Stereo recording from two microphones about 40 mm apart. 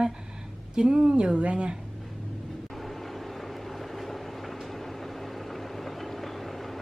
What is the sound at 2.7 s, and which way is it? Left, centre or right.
Vehicle, centre.